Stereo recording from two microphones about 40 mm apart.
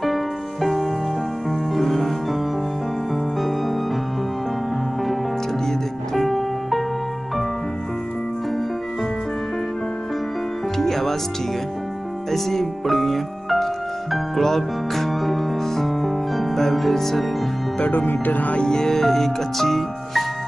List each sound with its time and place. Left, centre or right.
0.0 s music: centre
6.1 s music: centre
10.8 s music: centre
12.3 s music: centre
17.9 s speech: left
18.6 s speech: centre